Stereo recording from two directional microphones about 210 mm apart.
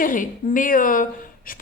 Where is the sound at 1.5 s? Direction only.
40° left (ahead or behind).